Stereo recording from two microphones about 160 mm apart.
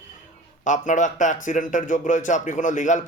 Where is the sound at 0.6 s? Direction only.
50° left (ahead or behind).